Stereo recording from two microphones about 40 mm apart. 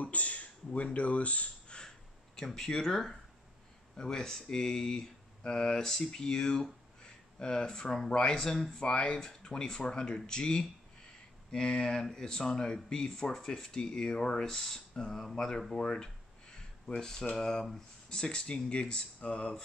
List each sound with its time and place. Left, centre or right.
0.0 s a sound: left
0.9 s speech: left
1.8 s gasp: centre
3.9 s speech: centre
15.1 s speech: centre
15.7 s a sound: centre
17.4 s speech: centre